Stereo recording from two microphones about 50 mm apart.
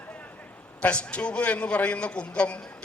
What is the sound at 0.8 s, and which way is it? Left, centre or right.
A man's voice, left.